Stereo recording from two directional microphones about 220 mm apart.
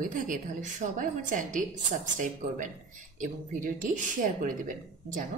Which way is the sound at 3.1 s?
35° right (ahead or behind).